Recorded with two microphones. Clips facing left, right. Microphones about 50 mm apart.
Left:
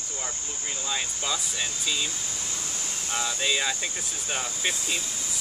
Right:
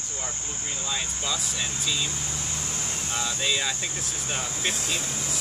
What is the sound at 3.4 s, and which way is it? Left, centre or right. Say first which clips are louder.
Speech: left 1 dB; centre.